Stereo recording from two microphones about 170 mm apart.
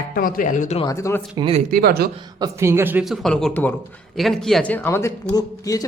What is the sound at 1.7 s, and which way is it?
Speech, 65° right (ahead or behind).